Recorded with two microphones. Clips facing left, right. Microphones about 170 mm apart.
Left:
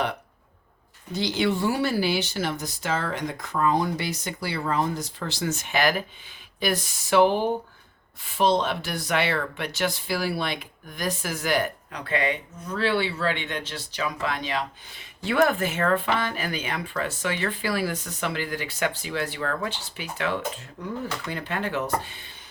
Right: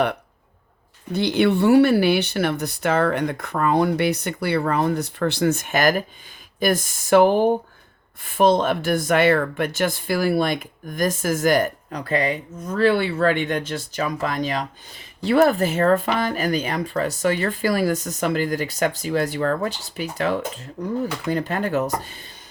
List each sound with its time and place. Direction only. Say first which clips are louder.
1.1 s speech: right 6 dB; 60° right (ahead or behind); by 22.3 s 40° right (ahead or behind)